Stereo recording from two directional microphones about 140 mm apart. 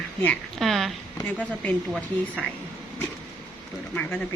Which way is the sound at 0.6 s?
Centre (ahead or behind).